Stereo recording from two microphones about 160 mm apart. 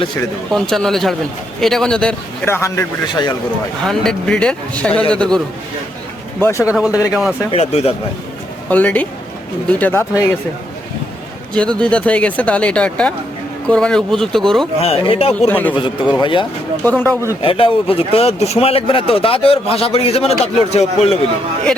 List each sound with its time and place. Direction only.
0.5 s a man's voice: 5° left (ahead or behind); by 3.3 s 20° left (ahead or behind)
3.8 s a man's voice: 5° left (ahead or behind)
6.4 s a man's voice: 15° left (ahead or behind)
6.7 s speech: 5° right (ahead or behind)
7.5 s speech: 40° left (ahead or behind)
8.7 s a man's voice: 10° left (ahead or behind)
11.5 s a man's voice: 5° left (ahead or behind)
14.8 s speech: 35° left (ahead or behind)
15.4 s a man's voice: 10° left (ahead or behind)
15.7 s speech: 30° left (ahead or behind)
16.8 s a man's voice: 10° left (ahead or behind)
17.4 s speech: 35° left (ahead or behind)